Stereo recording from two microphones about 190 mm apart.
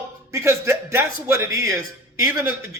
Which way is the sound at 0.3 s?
15° right (ahead or behind).